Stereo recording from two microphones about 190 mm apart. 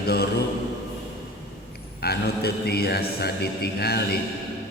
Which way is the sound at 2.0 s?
55° left (ahead or behind).